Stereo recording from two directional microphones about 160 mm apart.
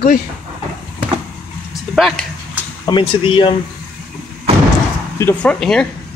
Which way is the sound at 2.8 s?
30° left (ahead or behind).